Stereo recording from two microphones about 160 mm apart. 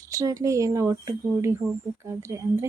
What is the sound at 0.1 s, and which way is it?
A woman's voice, 20° right (ahead or behind).